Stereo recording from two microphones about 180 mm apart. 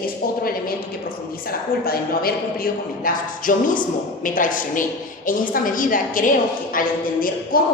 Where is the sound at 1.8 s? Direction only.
55° left (ahead or behind).